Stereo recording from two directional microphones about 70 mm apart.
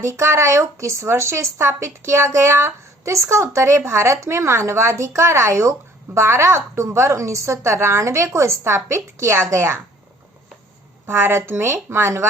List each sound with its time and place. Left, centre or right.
0.0 s a woman's voice: right
11.0 s speech: right